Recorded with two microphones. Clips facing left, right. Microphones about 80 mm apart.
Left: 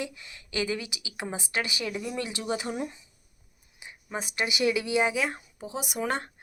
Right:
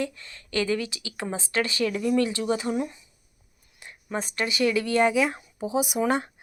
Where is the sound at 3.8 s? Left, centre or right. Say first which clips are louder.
Right 4 dB; centre.